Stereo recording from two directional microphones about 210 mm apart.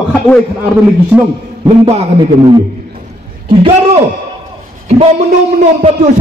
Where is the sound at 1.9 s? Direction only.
30° right (ahead or behind).